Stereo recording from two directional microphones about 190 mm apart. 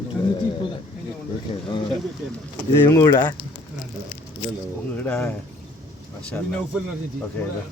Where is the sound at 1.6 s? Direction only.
25° left (ahead or behind).